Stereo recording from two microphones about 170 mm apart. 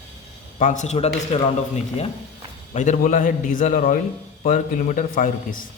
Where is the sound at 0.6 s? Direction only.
45° left (ahead or behind).